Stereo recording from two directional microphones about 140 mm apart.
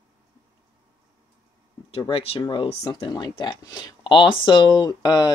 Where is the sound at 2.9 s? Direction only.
35° left (ahead or behind).